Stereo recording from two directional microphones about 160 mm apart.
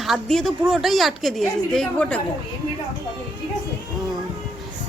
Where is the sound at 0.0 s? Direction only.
Centre (ahead or behind).